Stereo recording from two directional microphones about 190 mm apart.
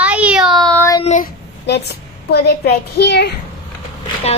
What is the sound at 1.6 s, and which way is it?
A woman's voice, 60° left (ahead or behind).